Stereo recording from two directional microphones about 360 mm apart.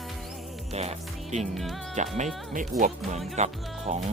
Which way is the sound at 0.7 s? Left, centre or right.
Centre.